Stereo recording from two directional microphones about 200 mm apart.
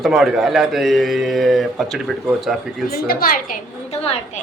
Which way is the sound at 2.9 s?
50° left (ahead or behind).